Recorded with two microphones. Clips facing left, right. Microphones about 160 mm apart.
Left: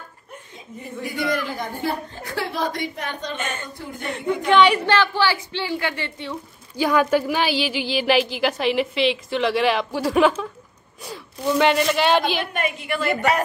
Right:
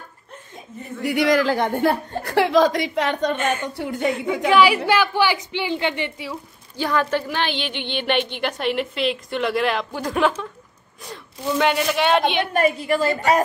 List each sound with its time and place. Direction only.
1.0 s speech: 85° right
1.8 s a woman's voice: 60° right (ahead or behind)
3.6 s a woman's voice: 75° right (ahead or behind)
4.5 s a woman's voice: 5° right (ahead or behind)
6.8 s a woman's voice: 10° left (ahead or behind)
12.5 s a woman's voice: 35° right (ahead or behind)